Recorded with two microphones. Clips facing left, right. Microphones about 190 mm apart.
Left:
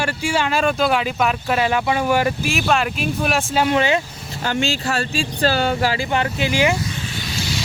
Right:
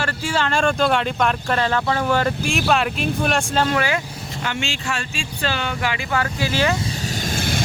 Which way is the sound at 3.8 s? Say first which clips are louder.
Left 4 dB; 20° left (ahead or behind).